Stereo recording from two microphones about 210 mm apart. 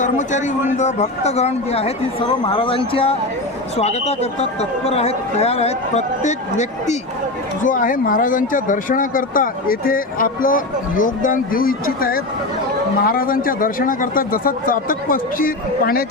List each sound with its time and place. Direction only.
0.0 s speech: 35° left (ahead or behind)